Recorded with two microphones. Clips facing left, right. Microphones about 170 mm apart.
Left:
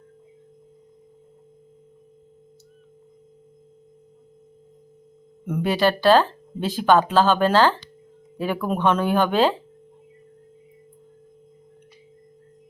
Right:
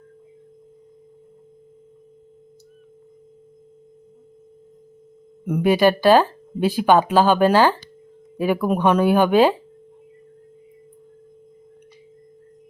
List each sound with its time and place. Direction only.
5.5 s speech: 15° right (ahead or behind)